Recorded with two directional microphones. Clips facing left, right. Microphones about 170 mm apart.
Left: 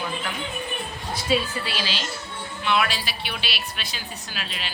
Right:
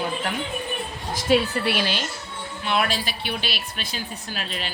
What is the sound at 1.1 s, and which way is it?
Speech, 65° right (ahead or behind).